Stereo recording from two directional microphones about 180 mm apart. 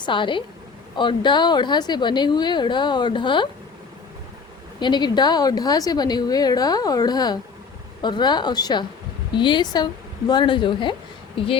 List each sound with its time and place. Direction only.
0.0 s a woman's voice: 25° left (ahead or behind)
4.8 s a woman's voice: 25° left (ahead or behind)